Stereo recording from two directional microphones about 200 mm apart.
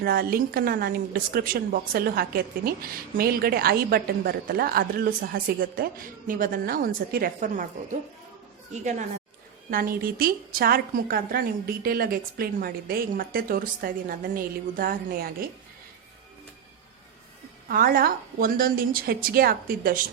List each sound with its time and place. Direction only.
0.0 s a woman's voice: 50° right (ahead or behind)
8.7 s a woman's voice: 35° right (ahead or behind)
17.7 s a woman's voice: 45° right (ahead or behind)